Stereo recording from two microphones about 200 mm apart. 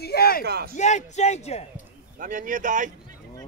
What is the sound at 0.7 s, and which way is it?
Speech, 35° left (ahead or behind).